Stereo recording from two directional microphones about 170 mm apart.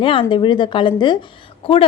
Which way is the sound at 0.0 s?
30° left (ahead or behind).